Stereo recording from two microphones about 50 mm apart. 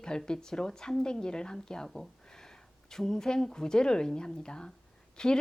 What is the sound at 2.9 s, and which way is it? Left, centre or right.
A woman's voice, centre.